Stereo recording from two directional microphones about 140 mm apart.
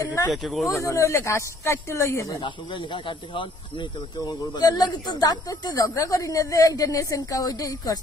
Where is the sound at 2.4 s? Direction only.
35° left (ahead or behind).